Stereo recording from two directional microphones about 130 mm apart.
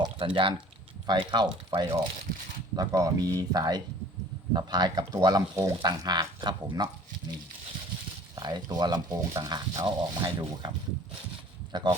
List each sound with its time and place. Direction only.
0.2 s speech: 45° right (ahead or behind)
8.4 s speech: 35° right (ahead or behind)